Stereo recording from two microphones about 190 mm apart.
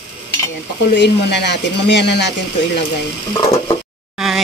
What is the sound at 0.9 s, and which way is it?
Speech, 65° left (ahead or behind).